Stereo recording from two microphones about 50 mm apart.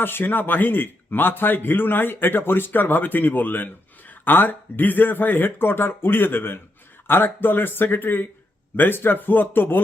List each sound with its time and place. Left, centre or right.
0.0 s a man's voice: left